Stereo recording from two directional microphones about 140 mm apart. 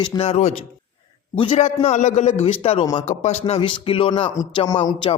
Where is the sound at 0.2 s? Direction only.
50° left (ahead or behind).